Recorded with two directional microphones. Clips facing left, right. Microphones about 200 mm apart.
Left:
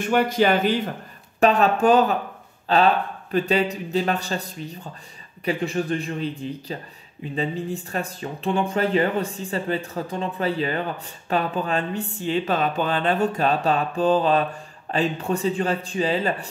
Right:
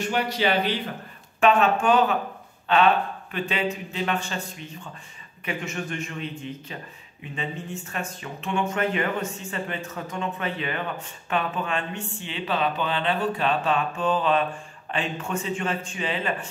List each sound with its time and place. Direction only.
0.0 s speech: 50° left (ahead or behind)